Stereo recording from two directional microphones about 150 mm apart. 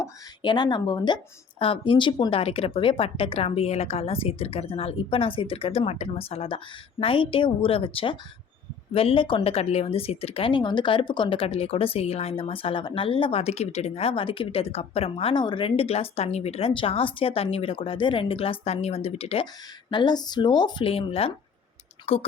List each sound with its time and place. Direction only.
0.4 s speech: 30° left (ahead or behind)
19.9 s speech: 30° left (ahead or behind)